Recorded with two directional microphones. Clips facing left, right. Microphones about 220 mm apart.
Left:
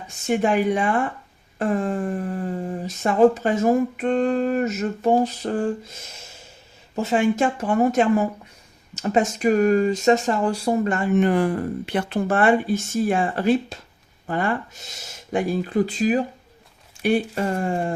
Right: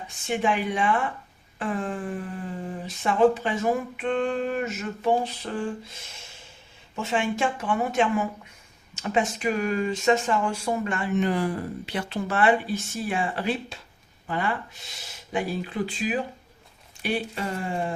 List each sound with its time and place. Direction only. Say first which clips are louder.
0.3 s speech: left 6 dB; 45° left (ahead or behind)